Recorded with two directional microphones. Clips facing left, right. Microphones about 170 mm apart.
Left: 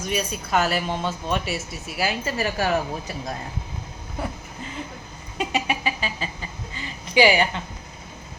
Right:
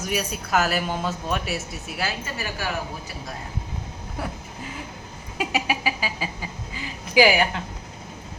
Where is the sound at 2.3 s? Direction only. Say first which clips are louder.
Left 10 dB; 40° left (ahead or behind).